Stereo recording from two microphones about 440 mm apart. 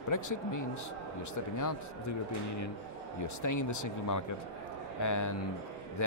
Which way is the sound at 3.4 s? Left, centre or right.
Left.